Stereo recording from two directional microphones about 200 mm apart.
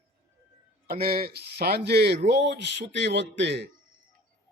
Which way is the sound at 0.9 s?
50° right (ahead or behind).